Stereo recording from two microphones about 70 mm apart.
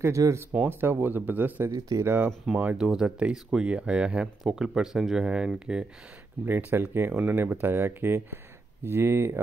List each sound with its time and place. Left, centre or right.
0.5 s speech: right
1.7 s speech: right
2.0 s speech: right
2.8 s speech: centre
6.4 s speech: right